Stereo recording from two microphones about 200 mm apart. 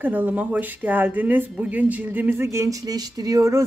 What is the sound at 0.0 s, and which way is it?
Speech, 10° right (ahead or behind).